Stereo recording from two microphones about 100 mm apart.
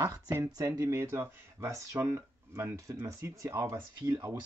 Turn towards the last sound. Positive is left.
turn(degrees=-35)  # may be behind; listen again after turning